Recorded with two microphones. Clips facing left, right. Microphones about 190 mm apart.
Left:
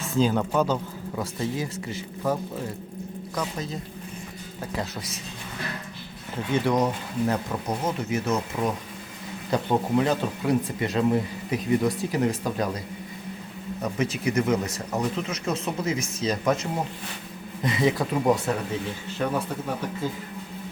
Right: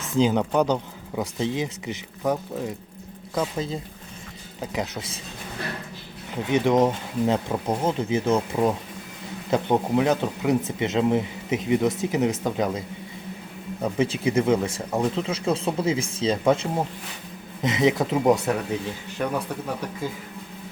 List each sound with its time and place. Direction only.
0.2 s speech: 20° right (ahead or behind)
6.5 s speech: 20° right (ahead or behind)
9.5 s speech: 20° right (ahead or behind)
13.8 s speech: 30° right (ahead or behind)